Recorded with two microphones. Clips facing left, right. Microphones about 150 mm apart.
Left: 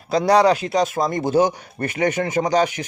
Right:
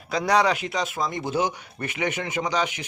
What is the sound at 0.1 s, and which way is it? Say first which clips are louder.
Speech: left 6 dB; 35° left (ahead or behind).